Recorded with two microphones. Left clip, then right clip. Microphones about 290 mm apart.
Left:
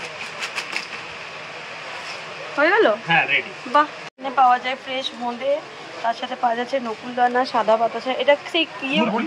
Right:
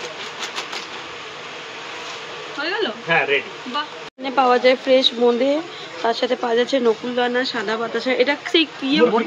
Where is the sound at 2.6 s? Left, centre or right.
Centre.